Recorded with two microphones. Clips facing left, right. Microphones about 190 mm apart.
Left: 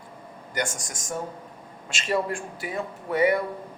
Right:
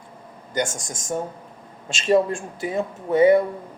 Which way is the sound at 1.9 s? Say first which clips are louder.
Right 7 dB; 25° right (ahead or behind).